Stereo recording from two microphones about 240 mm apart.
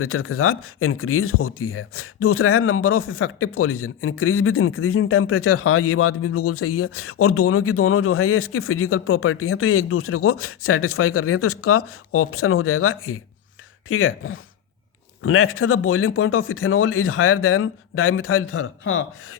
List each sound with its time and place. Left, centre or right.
0.0 s speech: left